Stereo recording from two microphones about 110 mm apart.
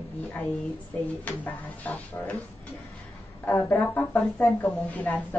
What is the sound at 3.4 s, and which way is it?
A woman's voice, 15° left (ahead or behind).